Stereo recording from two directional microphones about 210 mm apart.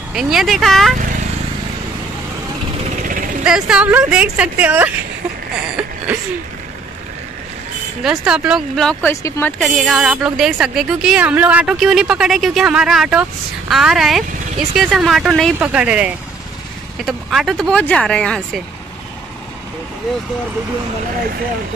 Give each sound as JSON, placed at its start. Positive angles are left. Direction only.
{"t": 0.1, "sound": "a woman's voice", "side_deg": 0}
{"t": 3.0, "sound": "vehicle", "side_deg": -40}
{"t": 3.4, "sound": "a woman's voice", "side_deg": -5}
{"t": 8.0, "sound": "a woman's voice", "side_deg": 0}
{"t": 9.1, "sound": "speech", "side_deg": 15}
{"t": 9.6, "sound": "a woman's voice", "side_deg": 0}